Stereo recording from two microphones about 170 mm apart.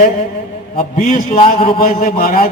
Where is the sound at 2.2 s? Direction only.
55° left (ahead or behind).